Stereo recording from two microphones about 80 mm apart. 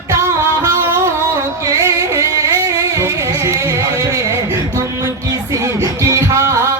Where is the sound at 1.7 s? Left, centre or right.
Right.